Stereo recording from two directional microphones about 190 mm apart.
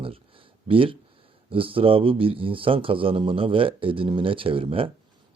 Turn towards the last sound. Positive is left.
turn(degrees=-30)  # may be behind; listen again after turning